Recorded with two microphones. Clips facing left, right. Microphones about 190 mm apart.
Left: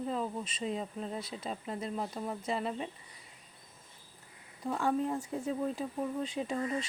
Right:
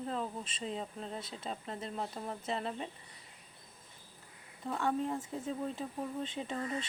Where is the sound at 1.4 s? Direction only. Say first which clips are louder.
Left 3 dB; 5° left (ahead or behind).